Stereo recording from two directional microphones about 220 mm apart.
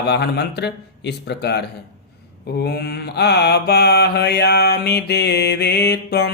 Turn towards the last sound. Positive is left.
turn(degrees=50)  # may be behind; listen again after turning